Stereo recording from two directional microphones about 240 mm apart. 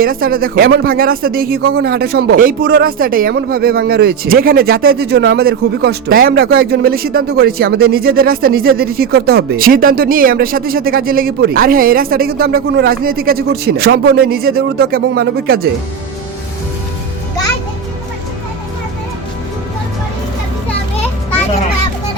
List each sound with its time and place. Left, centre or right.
0.0 s speech: right